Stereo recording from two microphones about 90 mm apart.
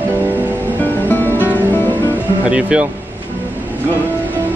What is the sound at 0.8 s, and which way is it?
Music, 20° left (ahead or behind).